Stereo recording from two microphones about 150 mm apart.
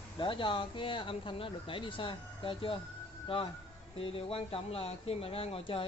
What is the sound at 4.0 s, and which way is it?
Speech, 40° left (ahead or behind).